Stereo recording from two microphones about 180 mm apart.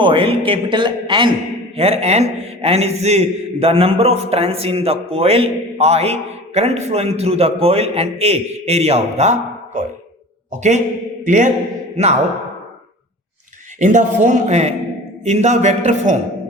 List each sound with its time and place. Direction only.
0.0 s a man's voice: 30° right (ahead or behind)
13.7 s a man's voice: 45° right (ahead or behind)